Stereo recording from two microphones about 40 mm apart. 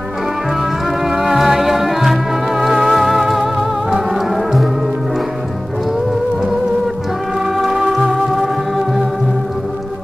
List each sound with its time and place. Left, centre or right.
1.1 s music: centre
7.4 s music: centre